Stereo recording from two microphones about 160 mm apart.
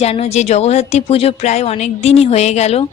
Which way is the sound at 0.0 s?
40° left (ahead or behind).